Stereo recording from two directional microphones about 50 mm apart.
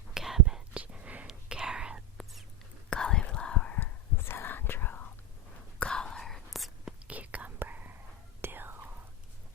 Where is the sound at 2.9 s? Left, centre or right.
Centre.